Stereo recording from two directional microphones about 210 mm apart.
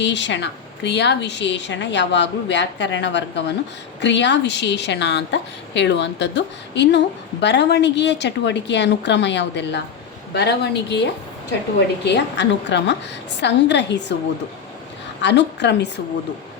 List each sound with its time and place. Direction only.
0.0 s a woman's voice: 60° left (ahead or behind)
15.2 s a woman's voice: 55° left (ahead or behind)